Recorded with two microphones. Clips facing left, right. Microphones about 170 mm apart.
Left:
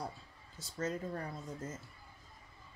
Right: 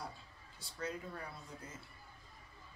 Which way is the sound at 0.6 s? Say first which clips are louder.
Left 5 dB; 45° left (ahead or behind).